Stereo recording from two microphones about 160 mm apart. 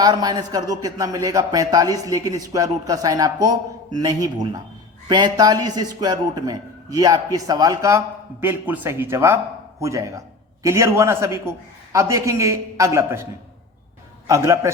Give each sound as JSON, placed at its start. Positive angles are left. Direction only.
{"t": 0.0, "sound": "a man's voice", "side_deg": -25}
{"t": 14.3, "sound": "a man's voice", "side_deg": -20}